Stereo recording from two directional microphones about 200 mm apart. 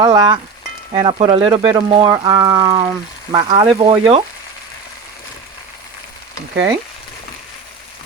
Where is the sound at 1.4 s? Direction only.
15° right (ahead or behind).